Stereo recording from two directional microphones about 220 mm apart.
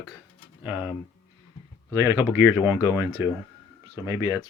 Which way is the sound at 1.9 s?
15° right (ahead or behind).